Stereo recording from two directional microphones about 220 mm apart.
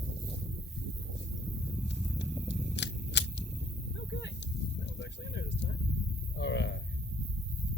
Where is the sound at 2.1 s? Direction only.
Centre (ahead or behind).